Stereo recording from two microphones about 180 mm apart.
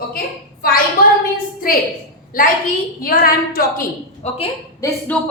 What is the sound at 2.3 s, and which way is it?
A woman's voice, 50° left (ahead or behind).